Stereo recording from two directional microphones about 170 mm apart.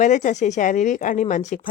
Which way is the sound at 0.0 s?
45° left (ahead or behind).